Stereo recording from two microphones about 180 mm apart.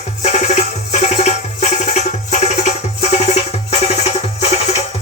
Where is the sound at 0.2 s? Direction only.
40° left (ahead or behind).